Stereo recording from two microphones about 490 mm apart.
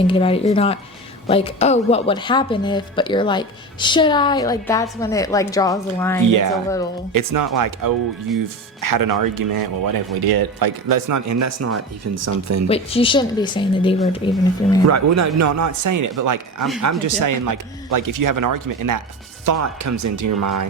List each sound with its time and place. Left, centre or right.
0.1 s speech: centre
6.2 s speech: right
12.6 s speech: centre
14.8 s speech: right